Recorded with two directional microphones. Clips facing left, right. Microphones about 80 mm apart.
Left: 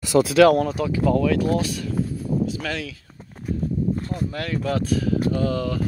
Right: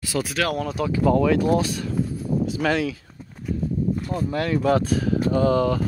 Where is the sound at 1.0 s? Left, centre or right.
Centre.